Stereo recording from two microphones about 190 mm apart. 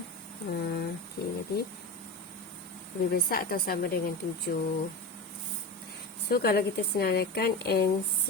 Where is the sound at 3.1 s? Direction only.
50° left (ahead or behind).